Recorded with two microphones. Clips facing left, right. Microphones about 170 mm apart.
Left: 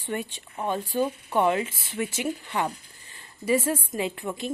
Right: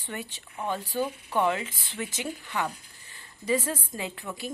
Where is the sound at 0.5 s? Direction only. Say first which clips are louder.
Left 3 dB; 15° left (ahead or behind); by 2.7 s 30° left (ahead or behind).